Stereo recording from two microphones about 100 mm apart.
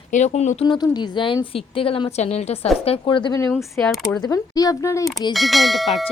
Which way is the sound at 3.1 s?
55° left (ahead or behind).